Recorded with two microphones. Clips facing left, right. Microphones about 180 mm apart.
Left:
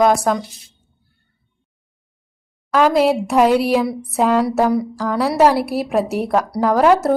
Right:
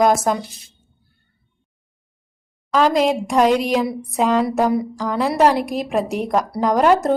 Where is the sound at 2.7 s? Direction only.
10° left (ahead or behind).